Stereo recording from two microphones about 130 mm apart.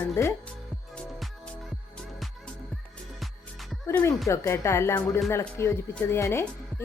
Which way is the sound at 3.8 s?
20° left (ahead or behind).